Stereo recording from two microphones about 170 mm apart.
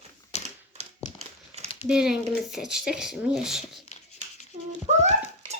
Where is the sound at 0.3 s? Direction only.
40° left (ahead or behind).